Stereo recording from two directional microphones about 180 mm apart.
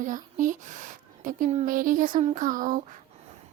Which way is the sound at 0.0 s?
45° right (ahead or behind).